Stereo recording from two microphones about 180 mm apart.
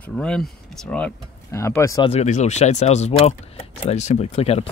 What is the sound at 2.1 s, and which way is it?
Speech, 40° left (ahead or behind).